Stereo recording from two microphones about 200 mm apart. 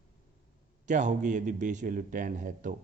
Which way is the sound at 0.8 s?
35° right (ahead or behind).